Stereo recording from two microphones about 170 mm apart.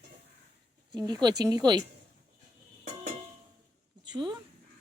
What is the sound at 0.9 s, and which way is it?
Speech, 25° right (ahead or behind).